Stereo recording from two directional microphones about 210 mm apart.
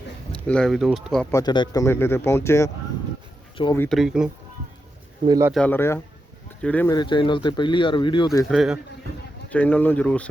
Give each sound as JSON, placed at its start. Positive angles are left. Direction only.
{"t": 0.4, "sound": "speech", "side_deg": 5}
{"t": 1.3, "sound": "speech", "side_deg": 15}
{"t": 3.8, "sound": "speech", "side_deg": 0}
{"t": 5.3, "sound": "speech", "side_deg": -10}
{"t": 5.5, "sound": "speech", "side_deg": 10}
{"t": 6.9, "sound": "speech", "side_deg": 20}
{"t": 8.4, "sound": "speech", "side_deg": 0}